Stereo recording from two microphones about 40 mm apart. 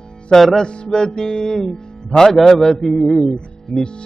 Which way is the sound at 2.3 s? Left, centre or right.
Centre.